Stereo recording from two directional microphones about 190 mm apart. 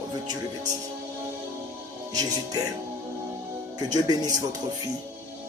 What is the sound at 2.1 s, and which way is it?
Speech, 20° right (ahead or behind).